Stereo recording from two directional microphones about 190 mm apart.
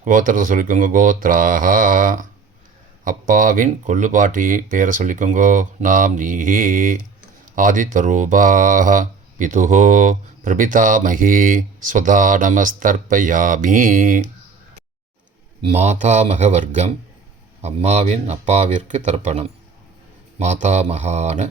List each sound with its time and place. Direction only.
0.0 s speech: 45° right (ahead or behind)
15.6 s speech: 35° right (ahead or behind)